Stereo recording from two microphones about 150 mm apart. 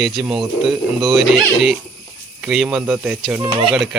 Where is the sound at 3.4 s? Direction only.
35° right (ahead or behind).